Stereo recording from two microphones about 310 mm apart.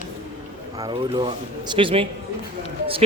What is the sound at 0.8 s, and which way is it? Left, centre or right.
Speech, centre.